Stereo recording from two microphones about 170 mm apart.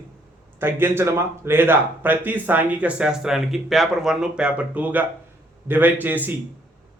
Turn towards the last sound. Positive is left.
turn(degrees=-10)  # may be behind; listen again after turning